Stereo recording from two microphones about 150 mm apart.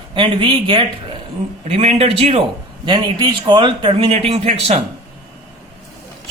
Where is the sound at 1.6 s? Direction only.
45° right (ahead or behind).